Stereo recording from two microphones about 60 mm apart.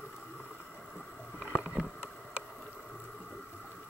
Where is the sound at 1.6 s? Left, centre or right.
Centre.